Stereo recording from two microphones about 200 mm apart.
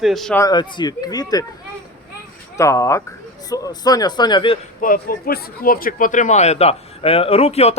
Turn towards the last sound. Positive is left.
turn(degrees=30)  # may be behind; listen again after turning